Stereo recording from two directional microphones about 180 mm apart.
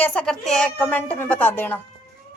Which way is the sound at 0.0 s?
5° left (ahead or behind).